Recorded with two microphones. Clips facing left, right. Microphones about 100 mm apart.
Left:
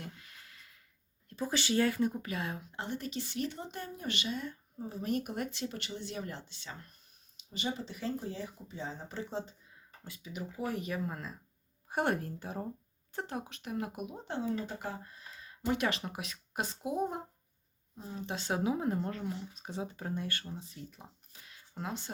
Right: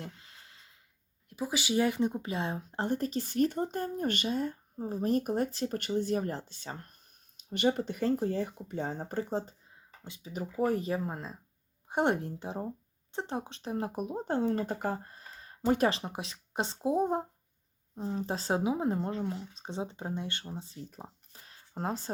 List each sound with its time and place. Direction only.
0.0 s a sound: 25° right (ahead or behind)
1.3 s speech: 10° right (ahead or behind); by 6.9 s 45° right (ahead or behind)
7.3 s speech: 60° right (ahead or behind); by 18.6 s 35° right (ahead or behind)
18.6 s speech: 25° right (ahead or behind); by 22.1 s 40° right (ahead or behind)